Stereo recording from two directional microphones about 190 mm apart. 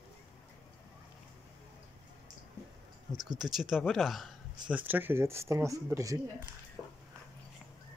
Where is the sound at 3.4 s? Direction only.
Centre (ahead or behind).